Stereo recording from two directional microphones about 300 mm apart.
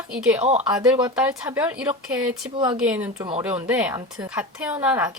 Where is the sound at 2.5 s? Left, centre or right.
Centre.